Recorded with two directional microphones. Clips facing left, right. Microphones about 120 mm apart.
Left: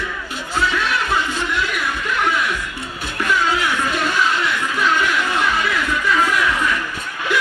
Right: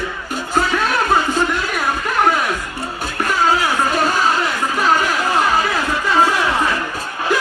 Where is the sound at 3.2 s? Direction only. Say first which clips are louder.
Right 2 dB; 40° right (ahead or behind).